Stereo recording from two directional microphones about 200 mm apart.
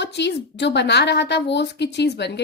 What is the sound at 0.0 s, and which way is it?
A woman's voice, 60° left (ahead or behind).